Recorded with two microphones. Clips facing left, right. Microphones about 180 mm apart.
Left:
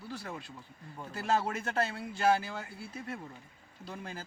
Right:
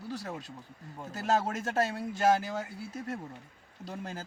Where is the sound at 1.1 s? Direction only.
40° right (ahead or behind).